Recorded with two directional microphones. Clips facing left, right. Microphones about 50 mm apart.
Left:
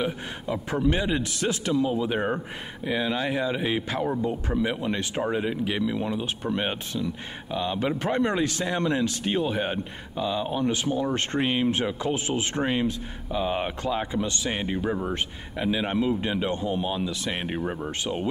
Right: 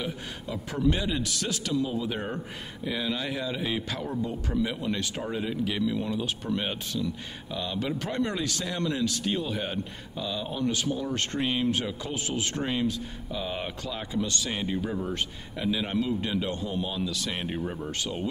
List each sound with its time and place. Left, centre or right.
0.0 s speech: left